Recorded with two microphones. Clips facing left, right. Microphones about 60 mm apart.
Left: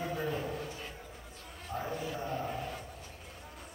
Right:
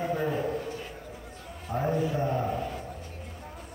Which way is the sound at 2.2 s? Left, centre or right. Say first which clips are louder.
Right 8 dB; right.